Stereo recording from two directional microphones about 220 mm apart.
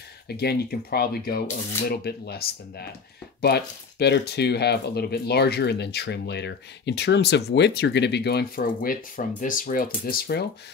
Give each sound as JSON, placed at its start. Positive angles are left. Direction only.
{"t": 0.3, "sound": "speech", "side_deg": 45}